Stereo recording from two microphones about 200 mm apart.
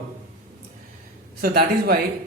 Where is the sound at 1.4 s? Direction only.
50° right (ahead or behind).